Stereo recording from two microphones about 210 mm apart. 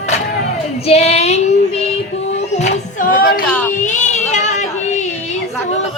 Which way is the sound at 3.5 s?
5° left (ahead or behind).